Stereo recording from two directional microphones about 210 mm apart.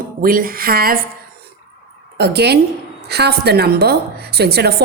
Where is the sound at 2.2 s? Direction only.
50° right (ahead or behind).